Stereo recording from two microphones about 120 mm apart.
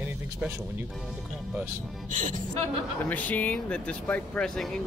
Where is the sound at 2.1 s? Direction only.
90° right.